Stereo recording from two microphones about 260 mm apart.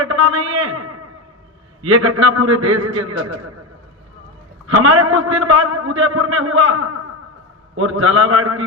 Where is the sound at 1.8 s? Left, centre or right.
Right.